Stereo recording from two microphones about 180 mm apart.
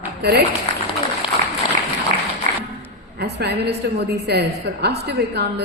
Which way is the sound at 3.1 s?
65° right (ahead or behind).